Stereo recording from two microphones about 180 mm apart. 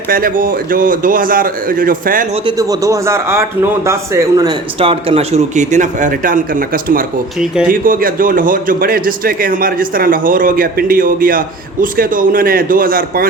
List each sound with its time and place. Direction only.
0.1 s a man's voice: 55° right (ahead or behind)
2.3 s a man's voice: 25° right (ahead or behind)
4.8 s a man's voice: 30° right (ahead or behind); by 7.0 s 50° right (ahead or behind)
7.3 s speech: 5° right (ahead or behind)
7.7 s a man's voice: 50° right (ahead or behind)